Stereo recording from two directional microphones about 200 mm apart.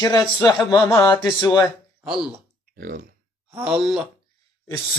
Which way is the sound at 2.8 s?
45° right (ahead or behind).